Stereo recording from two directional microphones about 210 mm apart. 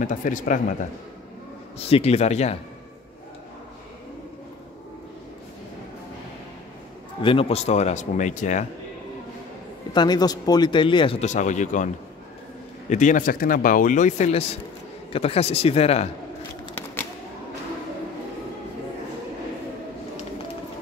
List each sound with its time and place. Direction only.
0.0 s a man's voice: 40° left (ahead or behind)
7.2 s a man's voice: 25° left (ahead or behind)
9.9 s speech: 20° left (ahead or behind); by 11.9 s 35° left (ahead or behind)
12.9 s a man's voice: 35° left (ahead or behind)